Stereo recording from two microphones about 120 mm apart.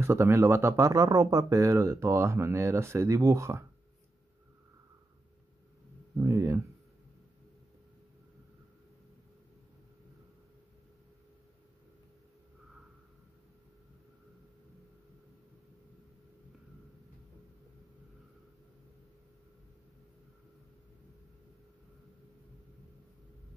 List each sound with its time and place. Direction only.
0.0 s speech: 20° right (ahead or behind)
6.1 s speech: 25° right (ahead or behind)